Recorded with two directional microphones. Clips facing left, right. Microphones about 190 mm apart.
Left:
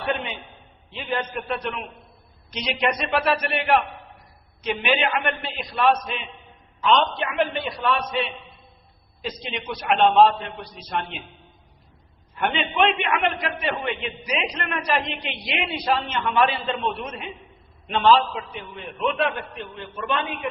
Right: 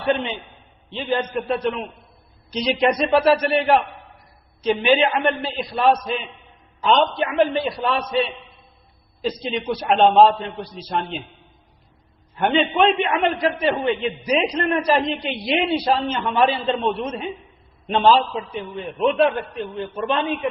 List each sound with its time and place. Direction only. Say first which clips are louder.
0.0 s a man's voice: right 5 dB; 30° right (ahead or behind)
12.4 s a man's voice: right 4 dB; 35° right (ahead or behind)